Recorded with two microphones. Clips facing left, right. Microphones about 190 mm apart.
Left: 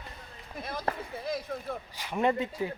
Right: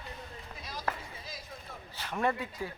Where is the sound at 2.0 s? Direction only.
15° left (ahead or behind).